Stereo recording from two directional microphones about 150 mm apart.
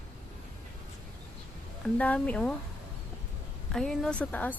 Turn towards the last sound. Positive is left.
turn(degrees=10)  # may be behind; listen again after turning